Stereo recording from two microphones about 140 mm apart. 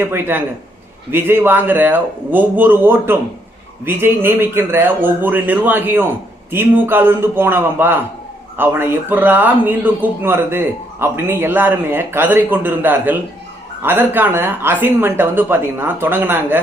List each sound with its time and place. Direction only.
0.0 s speech: 15° right (ahead or behind)